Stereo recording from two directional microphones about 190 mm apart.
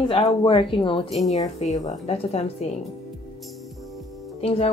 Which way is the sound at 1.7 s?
40° left (ahead or behind).